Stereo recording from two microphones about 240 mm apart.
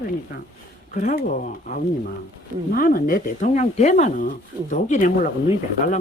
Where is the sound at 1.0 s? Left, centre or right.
Left.